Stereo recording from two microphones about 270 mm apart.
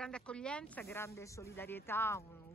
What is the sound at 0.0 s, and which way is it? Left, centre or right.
Speech, centre.